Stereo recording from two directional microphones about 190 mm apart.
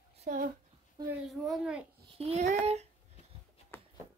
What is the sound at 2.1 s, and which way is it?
Speech, 35° right (ahead or behind).